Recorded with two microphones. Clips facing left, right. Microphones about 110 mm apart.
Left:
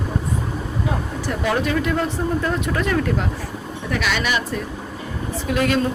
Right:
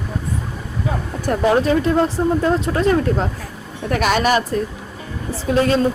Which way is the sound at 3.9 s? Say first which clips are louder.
Right 6 dB; 45° right (ahead or behind).